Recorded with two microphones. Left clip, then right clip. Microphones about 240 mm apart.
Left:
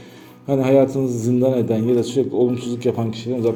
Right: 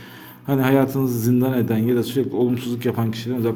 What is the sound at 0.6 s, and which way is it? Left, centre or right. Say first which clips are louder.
A man's voice: left 4 dB; right.